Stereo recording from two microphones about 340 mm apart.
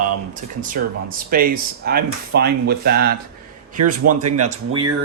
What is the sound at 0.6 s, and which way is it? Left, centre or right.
Speech, right.